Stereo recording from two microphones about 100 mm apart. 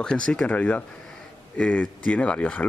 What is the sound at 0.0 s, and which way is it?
Speech, 10° left (ahead or behind).